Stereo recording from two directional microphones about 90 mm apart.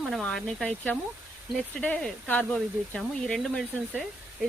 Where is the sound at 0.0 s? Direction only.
5° left (ahead or behind).